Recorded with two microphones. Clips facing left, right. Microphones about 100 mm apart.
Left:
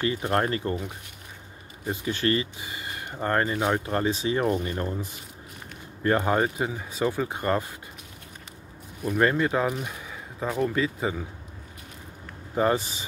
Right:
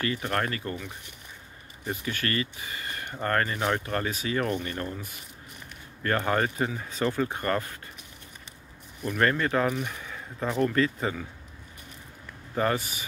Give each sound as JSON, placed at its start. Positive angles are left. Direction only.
{"t": 0.0, "sound": "speech", "side_deg": 25}
{"t": 9.2, "sound": "speech", "side_deg": 15}
{"t": 12.5, "sound": "speech", "side_deg": 20}